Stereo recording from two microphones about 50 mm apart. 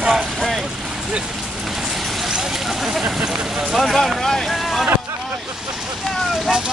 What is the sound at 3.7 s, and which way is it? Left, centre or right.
Speech, centre.